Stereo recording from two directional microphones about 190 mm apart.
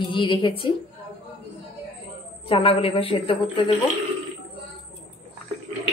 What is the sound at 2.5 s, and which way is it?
Speech, 30° left (ahead or behind).